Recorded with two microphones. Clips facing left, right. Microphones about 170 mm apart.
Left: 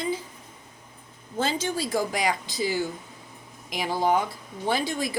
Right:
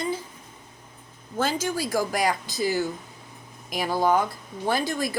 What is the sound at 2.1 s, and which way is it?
Speech, 50° right (ahead or behind).